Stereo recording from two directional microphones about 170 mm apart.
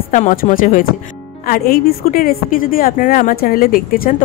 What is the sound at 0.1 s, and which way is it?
A woman's voice, 50° left (ahead or behind).